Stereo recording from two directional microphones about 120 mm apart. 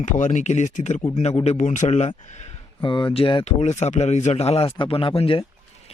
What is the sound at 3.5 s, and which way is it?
Speech, 75° left (ahead or behind).